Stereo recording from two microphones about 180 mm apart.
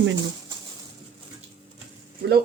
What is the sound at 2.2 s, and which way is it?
Speech, 65° right (ahead or behind).